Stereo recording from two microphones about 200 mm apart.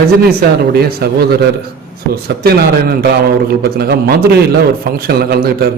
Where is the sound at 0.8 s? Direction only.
50° right (ahead or behind).